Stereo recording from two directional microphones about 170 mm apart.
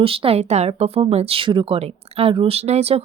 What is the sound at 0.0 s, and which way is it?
Speech, 35° right (ahead or behind).